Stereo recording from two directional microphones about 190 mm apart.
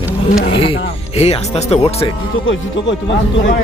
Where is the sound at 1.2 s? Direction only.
30° left (ahead or behind).